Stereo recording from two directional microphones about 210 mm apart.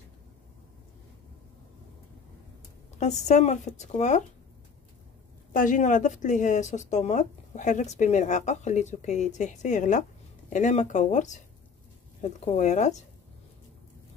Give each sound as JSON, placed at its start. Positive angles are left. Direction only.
{"t": 3.0, "sound": "speech", "side_deg": 35}
{"t": 5.5, "sound": "speech", "side_deg": 40}